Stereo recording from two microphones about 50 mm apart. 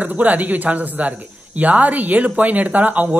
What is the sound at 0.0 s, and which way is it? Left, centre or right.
Speech, right.